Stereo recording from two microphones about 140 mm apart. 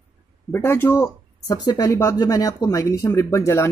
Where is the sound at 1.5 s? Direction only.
25° left (ahead or behind).